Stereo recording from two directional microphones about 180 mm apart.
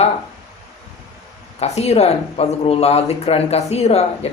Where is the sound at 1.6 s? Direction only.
35° left (ahead or behind).